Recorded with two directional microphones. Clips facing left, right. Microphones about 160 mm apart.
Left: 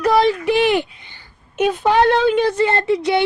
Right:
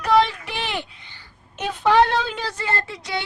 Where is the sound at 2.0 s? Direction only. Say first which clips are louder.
Left 10 dB; 60° left (ahead or behind).